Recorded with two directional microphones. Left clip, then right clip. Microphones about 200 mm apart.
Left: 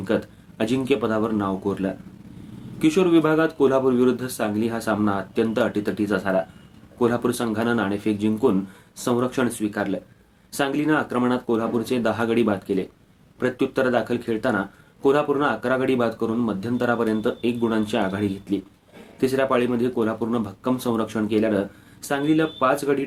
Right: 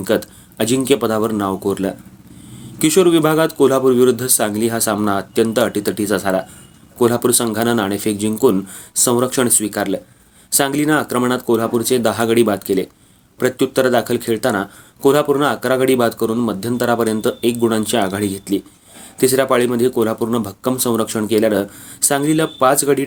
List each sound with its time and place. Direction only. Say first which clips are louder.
0.0 s speech: right 6 dB; 40° right (ahead or behind)